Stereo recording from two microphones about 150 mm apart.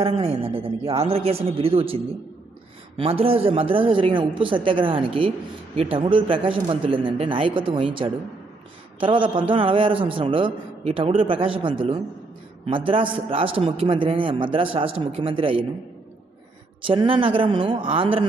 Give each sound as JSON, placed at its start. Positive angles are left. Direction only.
{"t": 0.0, "sound": "a man's voice", "side_deg": -40}
{"t": 3.0, "sound": "a man's voice", "side_deg": -40}
{"t": 16.8, "sound": "a man's voice", "side_deg": -35}